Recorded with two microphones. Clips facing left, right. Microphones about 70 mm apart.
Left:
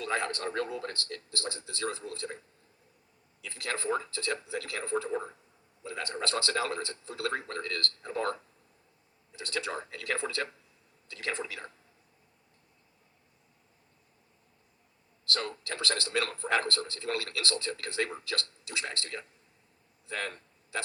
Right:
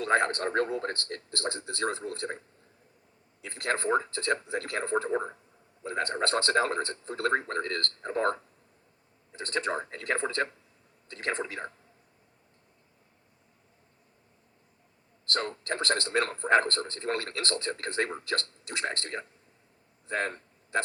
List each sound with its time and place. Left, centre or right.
0.0 s a man's voice: right
3.4 s a man's voice: right
15.3 s a man's voice: right
20.1 s a sound: right